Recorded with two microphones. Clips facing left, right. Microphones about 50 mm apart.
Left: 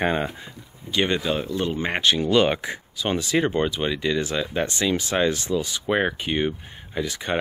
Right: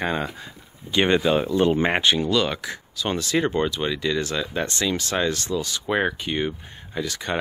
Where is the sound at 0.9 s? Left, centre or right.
Right.